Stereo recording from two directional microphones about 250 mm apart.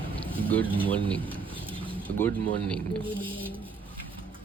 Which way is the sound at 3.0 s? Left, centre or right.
Centre.